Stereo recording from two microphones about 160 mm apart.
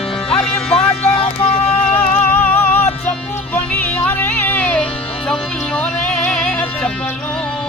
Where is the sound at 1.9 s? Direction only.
10° left (ahead or behind).